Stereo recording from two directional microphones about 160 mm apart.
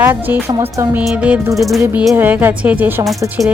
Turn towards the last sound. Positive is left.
turn(degrees=-20)  # may be behind; listen again after turning